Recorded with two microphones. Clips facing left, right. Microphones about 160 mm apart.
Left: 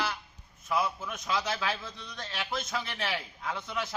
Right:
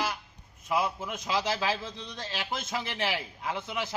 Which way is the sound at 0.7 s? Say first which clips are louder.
Right 1 dB; 25° right (ahead or behind).